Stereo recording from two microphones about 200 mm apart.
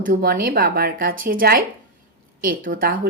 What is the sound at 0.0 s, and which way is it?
Speech, 45° right (ahead or behind).